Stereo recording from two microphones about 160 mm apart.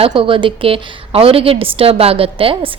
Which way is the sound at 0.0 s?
30° right (ahead or behind).